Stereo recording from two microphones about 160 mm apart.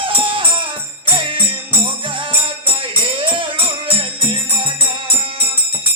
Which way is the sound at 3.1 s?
30° right (ahead or behind).